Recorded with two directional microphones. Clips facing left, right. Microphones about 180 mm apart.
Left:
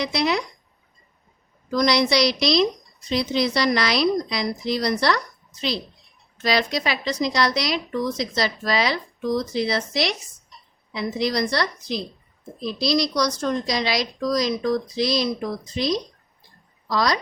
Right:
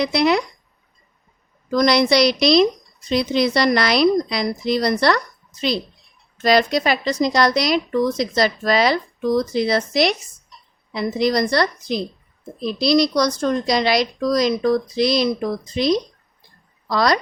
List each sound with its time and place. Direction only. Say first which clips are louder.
0.0 s a woman's voice: right 5 dB; 55° right (ahead or behind)
1.7 s a woman's voice: right 4 dB; 55° right (ahead or behind)